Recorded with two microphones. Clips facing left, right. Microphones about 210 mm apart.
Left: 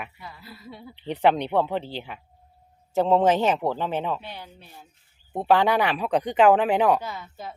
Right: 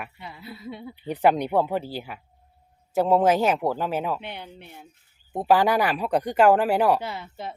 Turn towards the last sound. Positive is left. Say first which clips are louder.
# right 2 dB
turn(degrees=-25)  # may be behind; listen again after turning